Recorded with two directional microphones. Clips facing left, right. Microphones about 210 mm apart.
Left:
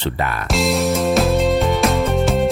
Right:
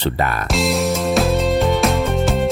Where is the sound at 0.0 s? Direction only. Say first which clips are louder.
Right 2 dB; 40° right (ahead or behind).